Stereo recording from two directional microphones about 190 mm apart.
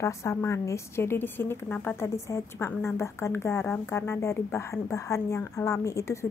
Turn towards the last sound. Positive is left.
turn(degrees=15)  # may be behind; listen again after turning